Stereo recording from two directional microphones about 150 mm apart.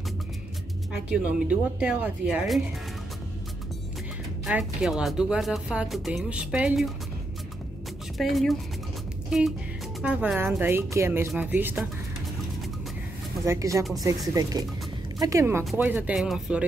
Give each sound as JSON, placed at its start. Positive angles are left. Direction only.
{"t": 1.0, "sound": "speech", "side_deg": -10}
{"t": 4.5, "sound": "speech", "side_deg": -5}
{"t": 8.2, "sound": "speech", "side_deg": 0}
{"t": 10.0, "sound": "speech", "side_deg": -10}
{"t": 13.5, "sound": "speech", "side_deg": -20}